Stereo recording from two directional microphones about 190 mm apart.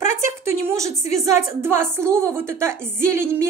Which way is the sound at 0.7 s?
15° right (ahead or behind).